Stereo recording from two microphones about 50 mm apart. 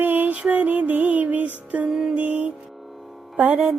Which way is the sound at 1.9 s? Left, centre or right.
Centre.